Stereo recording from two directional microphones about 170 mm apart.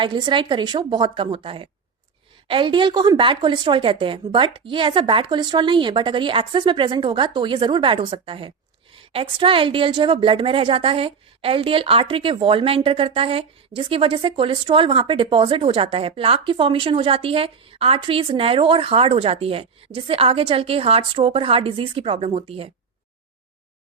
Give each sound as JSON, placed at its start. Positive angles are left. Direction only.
{"t": 0.0, "sound": "a woman's voice", "side_deg": -25}